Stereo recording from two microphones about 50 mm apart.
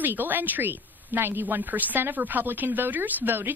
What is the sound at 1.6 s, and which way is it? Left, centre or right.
A woman's voice, right.